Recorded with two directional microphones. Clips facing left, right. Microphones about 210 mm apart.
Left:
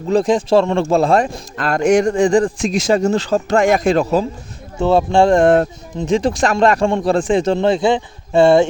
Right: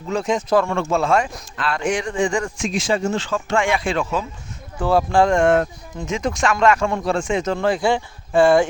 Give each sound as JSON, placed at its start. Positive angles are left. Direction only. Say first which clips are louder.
{"t": 0.1, "sound": "speech", "louder": "left 6 dB", "side_deg": 35}
{"t": 4.8, "sound": "speech", "louder": "left 4 dB", "side_deg": 25}